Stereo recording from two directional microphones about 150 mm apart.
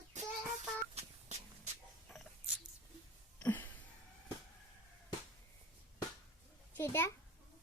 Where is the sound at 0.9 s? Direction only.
45° right (ahead or behind).